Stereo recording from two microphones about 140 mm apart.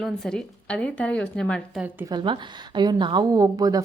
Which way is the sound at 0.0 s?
5° left (ahead or behind).